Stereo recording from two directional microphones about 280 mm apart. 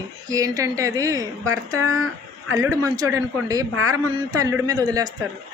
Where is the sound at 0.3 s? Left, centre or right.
Centre.